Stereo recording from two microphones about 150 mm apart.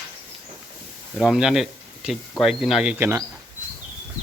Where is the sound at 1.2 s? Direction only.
5° right (ahead or behind).